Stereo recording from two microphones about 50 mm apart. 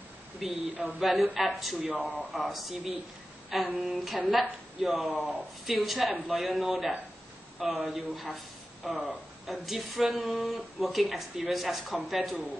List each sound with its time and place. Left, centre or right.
0.4 s speech: centre
0.7 s a man's voice: right
1.0 s speech: centre
2.0 s speech: left
2.3 s speech: centre
3.4 s a sound: centre
3.8 s speech: centre